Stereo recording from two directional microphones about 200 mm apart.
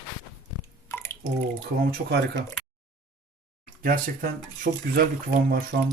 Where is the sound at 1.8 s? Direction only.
50° right (ahead or behind).